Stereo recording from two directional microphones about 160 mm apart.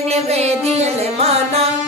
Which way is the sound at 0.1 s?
40° right (ahead or behind).